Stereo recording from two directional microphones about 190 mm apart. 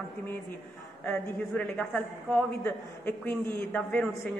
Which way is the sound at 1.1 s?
10° left (ahead or behind).